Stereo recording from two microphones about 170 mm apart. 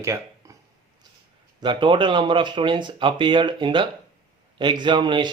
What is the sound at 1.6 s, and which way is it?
Speech, 25° right (ahead or behind).